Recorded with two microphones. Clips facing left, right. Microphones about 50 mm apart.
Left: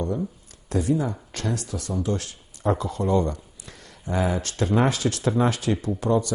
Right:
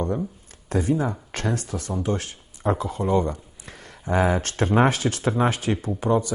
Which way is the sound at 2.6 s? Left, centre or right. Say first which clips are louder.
Even; centre.